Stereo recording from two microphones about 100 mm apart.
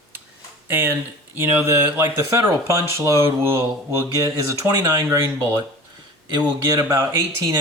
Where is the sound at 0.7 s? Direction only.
20° right (ahead or behind).